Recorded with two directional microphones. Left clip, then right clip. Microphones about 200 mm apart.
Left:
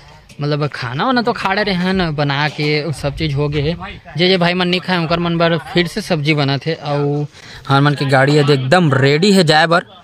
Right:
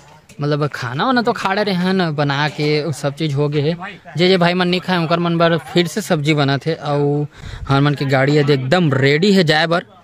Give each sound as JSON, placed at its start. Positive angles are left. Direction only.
{"t": 0.4, "sound": "a man's voice", "side_deg": -10}